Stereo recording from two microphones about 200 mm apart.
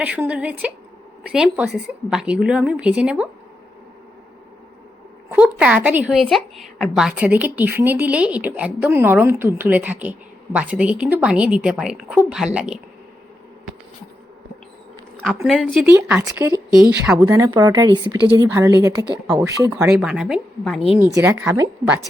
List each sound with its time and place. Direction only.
0.0 s a woman's voice: 5° right (ahead or behind)
5.3 s a woman's voice: 5° right (ahead or behind)
15.4 s a woman's voice: centre (ahead or behind)